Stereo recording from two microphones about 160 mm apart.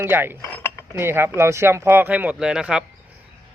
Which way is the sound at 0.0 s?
15° right (ahead or behind).